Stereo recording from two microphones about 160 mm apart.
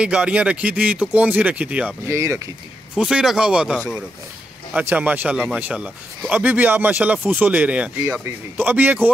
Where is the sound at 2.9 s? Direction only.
5° right (ahead or behind).